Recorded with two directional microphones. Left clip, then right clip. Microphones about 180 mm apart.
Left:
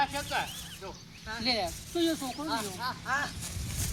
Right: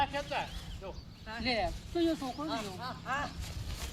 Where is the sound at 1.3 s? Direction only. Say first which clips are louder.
Left 2 dB; centre (ahead or behind).